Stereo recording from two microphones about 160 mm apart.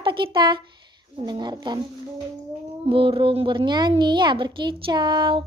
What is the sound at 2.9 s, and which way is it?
A woman's voice, 35° right (ahead or behind).